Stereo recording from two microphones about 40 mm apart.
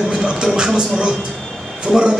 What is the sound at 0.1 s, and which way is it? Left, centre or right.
Music, centre.